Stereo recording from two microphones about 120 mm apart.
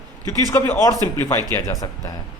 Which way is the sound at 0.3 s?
25° left (ahead or behind).